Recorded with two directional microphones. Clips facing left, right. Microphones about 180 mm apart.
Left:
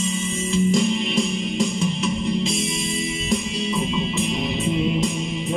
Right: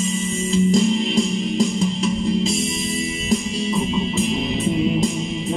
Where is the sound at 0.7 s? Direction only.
35° right (ahead or behind).